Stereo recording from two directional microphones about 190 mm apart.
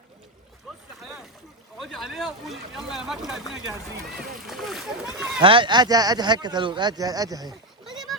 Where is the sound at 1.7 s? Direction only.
Centre (ahead or behind).